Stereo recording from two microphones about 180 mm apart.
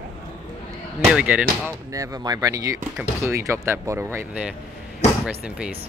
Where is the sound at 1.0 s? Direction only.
5° right (ahead or behind).